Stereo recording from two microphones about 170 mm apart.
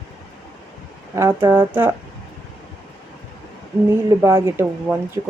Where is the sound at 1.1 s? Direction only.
15° right (ahead or behind).